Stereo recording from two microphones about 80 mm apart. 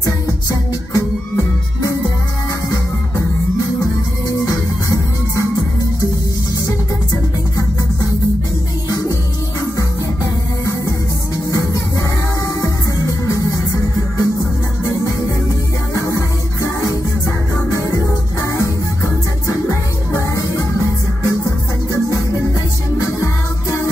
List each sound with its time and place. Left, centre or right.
0.0 s music: left
4.3 s music: left
12.6 s music: left
16.1 s music: left
19.4 s music: left
23.0 s music: left